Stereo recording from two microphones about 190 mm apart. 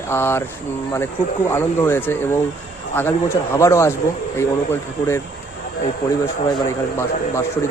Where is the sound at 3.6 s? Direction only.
15° left (ahead or behind).